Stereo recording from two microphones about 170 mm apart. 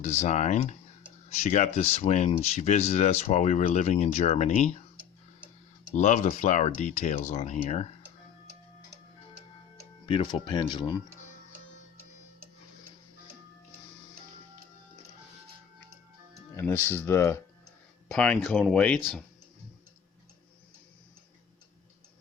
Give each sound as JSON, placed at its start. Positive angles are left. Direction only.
{"t": 0.0, "sound": "speech", "side_deg": 40}
{"t": 6.0, "sound": "speech", "side_deg": 45}
{"t": 10.1, "sound": "speech", "side_deg": 30}
{"t": 16.6, "sound": "speech", "side_deg": 15}
{"t": 18.1, "sound": "speech", "side_deg": 5}